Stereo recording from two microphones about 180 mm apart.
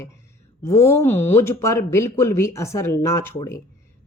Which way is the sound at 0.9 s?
15° left (ahead or behind).